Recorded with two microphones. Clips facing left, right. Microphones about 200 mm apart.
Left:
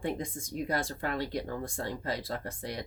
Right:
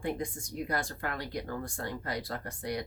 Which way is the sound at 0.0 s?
20° left (ahead or behind).